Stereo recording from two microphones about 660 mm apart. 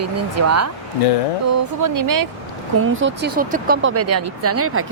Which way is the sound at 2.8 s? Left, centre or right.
Centre.